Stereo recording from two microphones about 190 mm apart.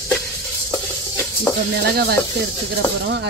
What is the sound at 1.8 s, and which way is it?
Speech, 60° right (ahead or behind).